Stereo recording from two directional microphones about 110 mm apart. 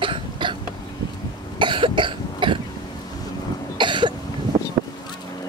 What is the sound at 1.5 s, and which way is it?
Cough, 50° right (ahead or behind).